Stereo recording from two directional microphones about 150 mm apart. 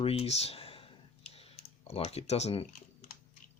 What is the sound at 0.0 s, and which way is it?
Speech, 40° left (ahead or behind).